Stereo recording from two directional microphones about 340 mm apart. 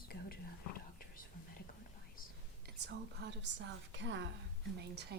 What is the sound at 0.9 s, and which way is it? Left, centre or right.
Whispering, left.